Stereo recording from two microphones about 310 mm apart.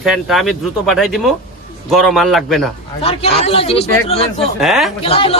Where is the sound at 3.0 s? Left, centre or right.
Centre.